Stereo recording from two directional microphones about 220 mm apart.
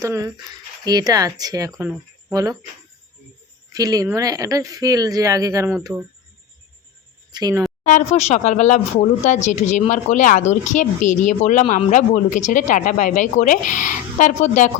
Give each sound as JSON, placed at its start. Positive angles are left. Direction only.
{"t": 0.0, "sound": "a woman's voice", "side_deg": -15}
{"t": 3.7, "sound": "a woman's voice", "side_deg": -15}
{"t": 7.3, "sound": "a woman's voice", "side_deg": -20}
{"t": 7.9, "sound": "speech", "side_deg": 35}